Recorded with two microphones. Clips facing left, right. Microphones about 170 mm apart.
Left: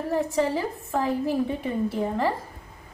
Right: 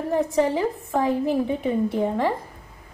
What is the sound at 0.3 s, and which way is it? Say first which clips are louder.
A woman's voice: right 3 dB; 20° right (ahead or behind).